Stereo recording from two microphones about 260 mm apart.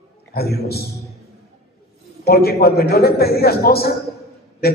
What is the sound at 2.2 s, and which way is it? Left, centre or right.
A man's voice, left.